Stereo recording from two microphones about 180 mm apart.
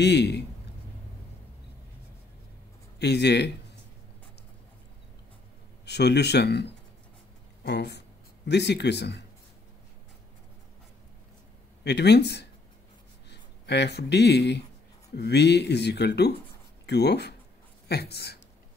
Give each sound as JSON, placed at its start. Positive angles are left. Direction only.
{"t": 0.0, "sound": "speech", "side_deg": 70}
{"t": 3.0, "sound": "speech", "side_deg": 65}
{"t": 5.9, "sound": "speech", "side_deg": 70}
{"t": 11.8, "sound": "a woman's voice", "side_deg": 70}